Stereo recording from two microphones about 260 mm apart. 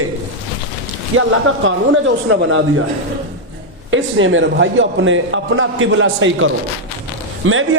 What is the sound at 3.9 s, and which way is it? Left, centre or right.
A man's voice, right.